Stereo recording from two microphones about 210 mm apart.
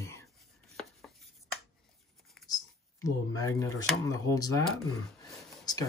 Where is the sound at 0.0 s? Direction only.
15° left (ahead or behind).